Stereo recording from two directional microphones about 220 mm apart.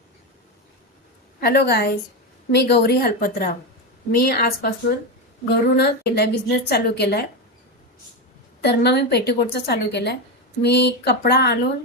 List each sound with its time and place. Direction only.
1.4 s a woman's voice: 45° left (ahead or behind)
8.6 s a woman's voice: 50° left (ahead or behind)